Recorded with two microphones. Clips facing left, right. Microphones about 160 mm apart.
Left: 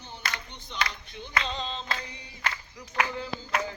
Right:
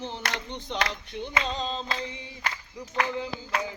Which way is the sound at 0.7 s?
75° right (ahead or behind).